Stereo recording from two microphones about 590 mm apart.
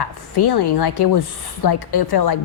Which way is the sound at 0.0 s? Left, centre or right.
Left.